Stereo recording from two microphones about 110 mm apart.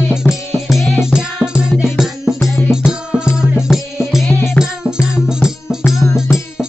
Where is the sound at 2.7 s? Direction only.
5° right (ahead or behind).